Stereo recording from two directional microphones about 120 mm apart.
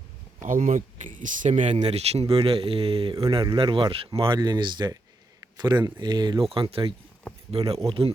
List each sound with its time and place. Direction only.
0.4 s speech: 90° right; by 3.2 s 50° right (ahead or behind)
3.4 s speech: 40° right (ahead or behind)
4.4 s speech: 35° right (ahead or behind)
6.5 s speech: 50° right (ahead or behind)